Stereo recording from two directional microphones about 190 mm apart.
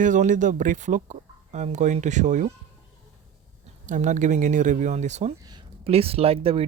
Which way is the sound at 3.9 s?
40° right (ahead or behind).